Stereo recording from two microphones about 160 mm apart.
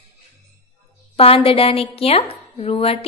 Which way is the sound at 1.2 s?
35° left (ahead or behind).